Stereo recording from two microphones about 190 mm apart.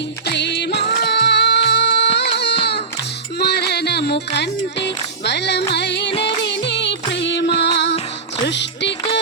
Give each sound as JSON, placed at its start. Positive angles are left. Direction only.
{"t": 0.3, "sound": "music", "side_deg": 65}